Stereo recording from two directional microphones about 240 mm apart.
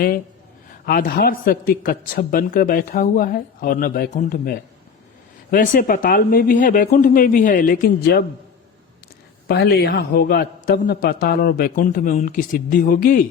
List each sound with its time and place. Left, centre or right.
0.9 s a man's voice: left
9.5 s a man's voice: left